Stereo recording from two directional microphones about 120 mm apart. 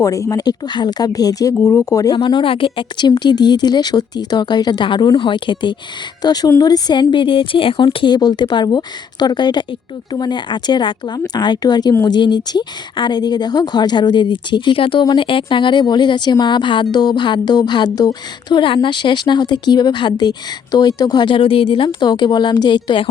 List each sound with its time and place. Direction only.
0.0 s speech: 30° left (ahead or behind)
2.1 s speech: 45° left (ahead or behind)
21.8 s speech: 40° left (ahead or behind)